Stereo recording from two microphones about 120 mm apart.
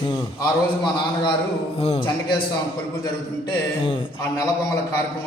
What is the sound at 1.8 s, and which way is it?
Speech, 55° left (ahead or behind).